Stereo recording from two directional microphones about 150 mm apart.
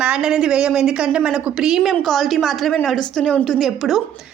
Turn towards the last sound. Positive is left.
turn(degrees=0)  # may be behind; listen again after turning